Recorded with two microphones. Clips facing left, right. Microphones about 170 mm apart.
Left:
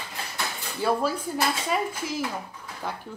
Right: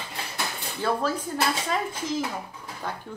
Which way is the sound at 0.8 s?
10° left (ahead or behind).